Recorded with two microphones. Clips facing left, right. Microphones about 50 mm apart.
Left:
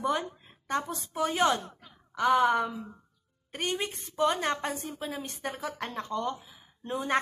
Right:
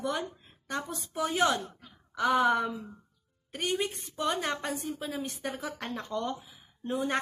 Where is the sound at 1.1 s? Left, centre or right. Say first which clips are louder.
Left 1 dB; centre.